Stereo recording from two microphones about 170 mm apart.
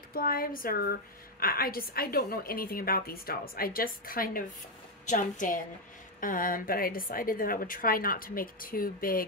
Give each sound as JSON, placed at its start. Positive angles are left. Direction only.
{"t": 0.1, "sound": "a woman's voice", "side_deg": 60}